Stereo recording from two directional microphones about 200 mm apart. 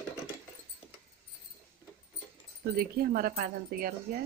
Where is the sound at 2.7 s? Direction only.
50° right (ahead or behind).